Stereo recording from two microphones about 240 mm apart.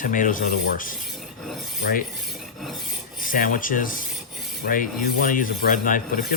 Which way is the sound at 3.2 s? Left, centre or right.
Left.